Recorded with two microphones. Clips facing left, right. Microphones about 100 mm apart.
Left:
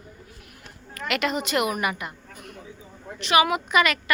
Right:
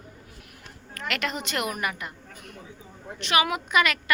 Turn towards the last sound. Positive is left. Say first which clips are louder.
# left 2 dB
turn(degrees=0)  # may be behind; listen again after turning